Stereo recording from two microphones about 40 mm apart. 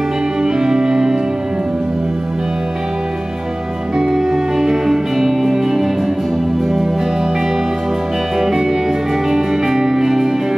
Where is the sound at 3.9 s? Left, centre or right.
Centre.